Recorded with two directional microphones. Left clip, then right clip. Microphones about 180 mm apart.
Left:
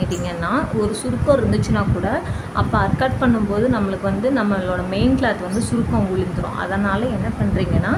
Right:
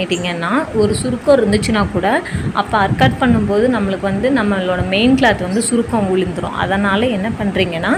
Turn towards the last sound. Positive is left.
turn(degrees=-15)  # may be behind; listen again after turning